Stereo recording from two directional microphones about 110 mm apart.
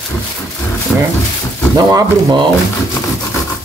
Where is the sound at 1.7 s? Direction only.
35° right (ahead or behind).